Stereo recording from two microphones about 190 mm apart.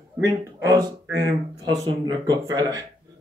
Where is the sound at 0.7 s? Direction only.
15° right (ahead or behind).